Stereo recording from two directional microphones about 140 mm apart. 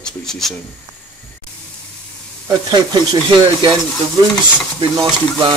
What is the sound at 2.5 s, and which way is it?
Speech, 30° right (ahead or behind).